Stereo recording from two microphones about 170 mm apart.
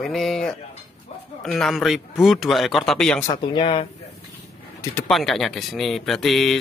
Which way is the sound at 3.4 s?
30° left (ahead or behind).